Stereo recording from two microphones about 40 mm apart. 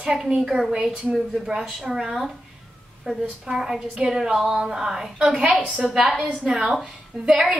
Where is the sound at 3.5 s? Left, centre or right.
Centre.